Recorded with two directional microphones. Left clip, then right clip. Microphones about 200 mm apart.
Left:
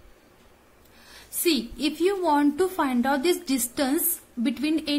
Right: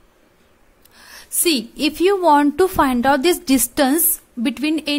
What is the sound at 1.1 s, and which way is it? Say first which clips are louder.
A woman's voice: right 6 dB; 45° right (ahead or behind).